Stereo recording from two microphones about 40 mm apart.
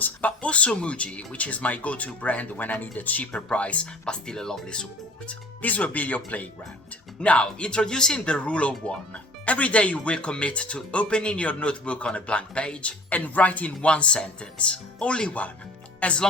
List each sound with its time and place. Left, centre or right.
0.0 s speech: left
5.6 s speech: left
7.2 s speech: left